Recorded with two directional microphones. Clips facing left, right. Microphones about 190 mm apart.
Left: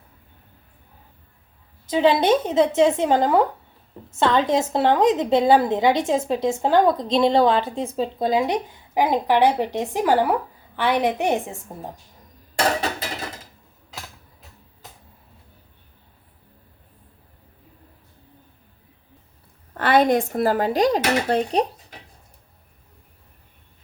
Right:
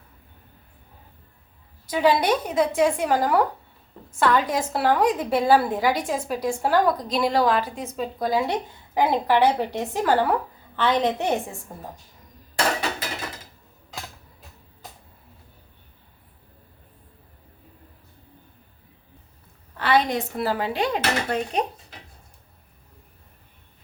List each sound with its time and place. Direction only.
1.9 s a woman's voice: 25° left (ahead or behind)
19.7 s speech: 50° left (ahead or behind)